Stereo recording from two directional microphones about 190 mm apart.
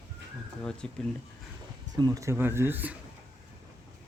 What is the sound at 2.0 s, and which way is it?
Speech, 15° right (ahead or behind).